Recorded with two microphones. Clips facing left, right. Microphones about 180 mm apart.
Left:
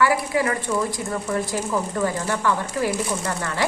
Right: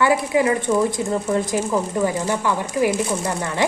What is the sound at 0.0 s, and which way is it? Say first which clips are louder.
A woman's voice: right 3 dB; 20° right (ahead or behind).